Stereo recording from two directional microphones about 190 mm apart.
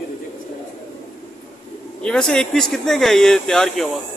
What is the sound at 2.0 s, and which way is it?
Speech, 5° left (ahead or behind).